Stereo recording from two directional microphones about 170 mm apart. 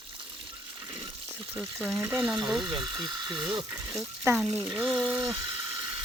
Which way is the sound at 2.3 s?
25° right (ahead or behind).